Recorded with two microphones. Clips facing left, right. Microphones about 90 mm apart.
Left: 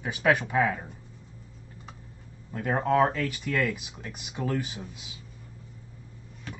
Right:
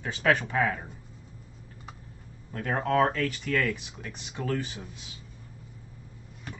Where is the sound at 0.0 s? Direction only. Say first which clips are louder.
Left 1 dB; 10° left (ahead or behind).